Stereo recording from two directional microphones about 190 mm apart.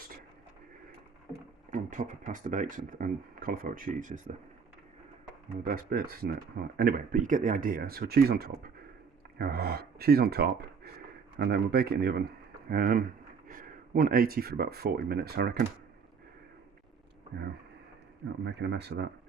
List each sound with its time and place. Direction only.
1.7 s speech: 45° right (ahead or behind)
5.6 s speech: 50° right (ahead or behind)
18.7 s speech: 60° right (ahead or behind)